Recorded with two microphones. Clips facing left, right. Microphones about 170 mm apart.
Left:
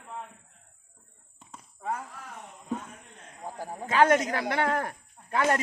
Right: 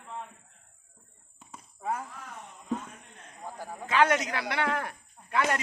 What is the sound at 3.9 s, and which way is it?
Speech, 45° left (ahead or behind).